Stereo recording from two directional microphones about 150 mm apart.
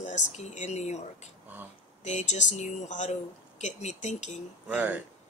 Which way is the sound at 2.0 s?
50° left (ahead or behind).